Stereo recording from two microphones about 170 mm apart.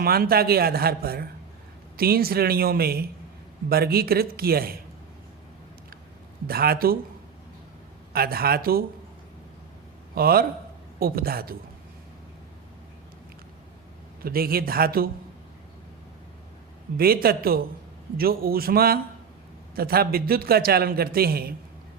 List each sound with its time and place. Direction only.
0.0 s a man's voice: 60° right (ahead or behind)
6.5 s a man's voice: 65° right (ahead or behind)
8.1 s a man's voice: 60° right (ahead or behind)
10.2 s a man's voice: 60° right (ahead or behind)
14.2 s a man's voice: 60° right (ahead or behind)
17.0 s a man's voice: 60° right (ahead or behind)